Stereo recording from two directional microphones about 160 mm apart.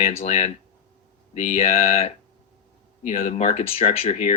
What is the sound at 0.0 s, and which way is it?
Speech, 45° left (ahead or behind).